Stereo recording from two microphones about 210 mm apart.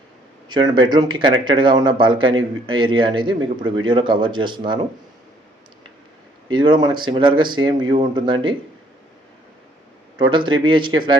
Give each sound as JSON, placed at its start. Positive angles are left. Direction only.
{"t": 0.4, "sound": "speech", "side_deg": -20}
{"t": 6.5, "sound": "speech", "side_deg": -20}
{"t": 10.3, "sound": "speech", "side_deg": -25}